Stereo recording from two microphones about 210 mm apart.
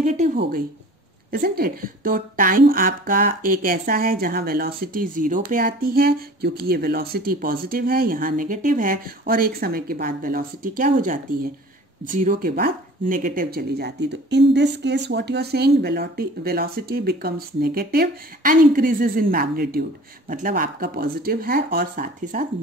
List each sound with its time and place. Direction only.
0.0 s a woman's voice: 35° right (ahead or behind)